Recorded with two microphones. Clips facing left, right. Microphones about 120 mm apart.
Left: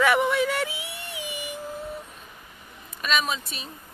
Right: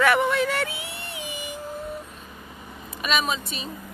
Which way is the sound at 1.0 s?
10° left (ahead or behind).